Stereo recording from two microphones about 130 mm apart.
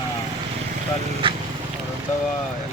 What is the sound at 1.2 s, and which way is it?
Speech, 40° right (ahead or behind).